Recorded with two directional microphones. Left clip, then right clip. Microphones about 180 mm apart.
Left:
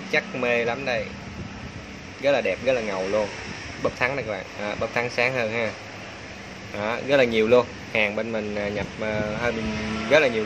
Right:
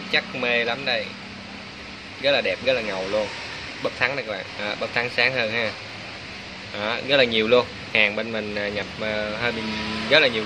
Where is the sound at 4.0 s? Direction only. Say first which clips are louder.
Right 3 dB; 20° left (ahead or behind).